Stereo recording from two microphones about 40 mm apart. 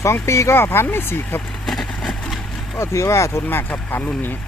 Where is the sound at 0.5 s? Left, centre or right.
Left.